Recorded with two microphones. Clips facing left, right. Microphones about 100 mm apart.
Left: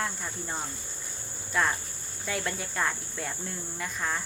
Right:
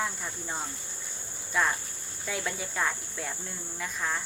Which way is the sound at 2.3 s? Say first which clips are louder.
Left 1 dB; centre (ahead or behind).